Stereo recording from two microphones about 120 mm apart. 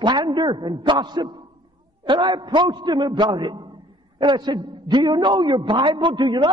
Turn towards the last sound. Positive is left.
turn(degrees=-40)  # may be behind; listen again after turning